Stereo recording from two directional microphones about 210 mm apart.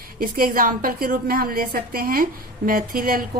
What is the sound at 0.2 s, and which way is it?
A woman's voice, 40° right (ahead or behind).